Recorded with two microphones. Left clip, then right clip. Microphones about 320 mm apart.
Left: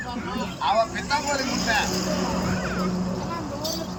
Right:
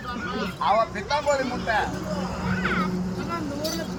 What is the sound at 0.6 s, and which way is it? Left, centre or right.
Speech, centre.